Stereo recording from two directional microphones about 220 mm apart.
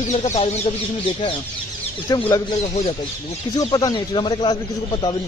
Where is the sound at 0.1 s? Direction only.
30° left (ahead or behind).